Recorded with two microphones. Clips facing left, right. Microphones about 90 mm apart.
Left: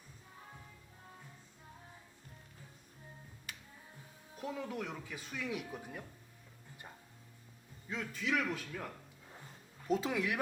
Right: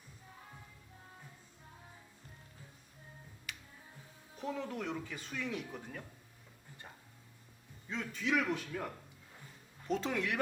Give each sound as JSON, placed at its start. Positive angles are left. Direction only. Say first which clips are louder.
{"t": 4.4, "sound": "speech", "louder": "right 1 dB", "side_deg": 5}
{"t": 7.9, "sound": "speech", "louder": "right 1 dB", "side_deg": 0}